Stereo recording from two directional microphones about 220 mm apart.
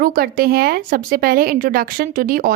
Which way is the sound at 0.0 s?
40° right (ahead or behind).